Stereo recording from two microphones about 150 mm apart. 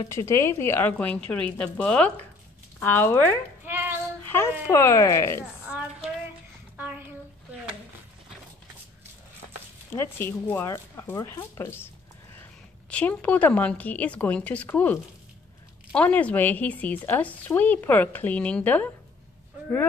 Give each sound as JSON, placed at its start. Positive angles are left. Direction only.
{"t": 0.0, "sound": "a woman's voice", "side_deg": 20}
{"t": 3.6, "sound": "child singing", "side_deg": -15}
{"t": 4.2, "sound": "speech", "side_deg": 15}
{"t": 9.9, "sound": "a woman's voice", "side_deg": 15}
{"t": 12.9, "sound": "a woman's voice", "side_deg": 10}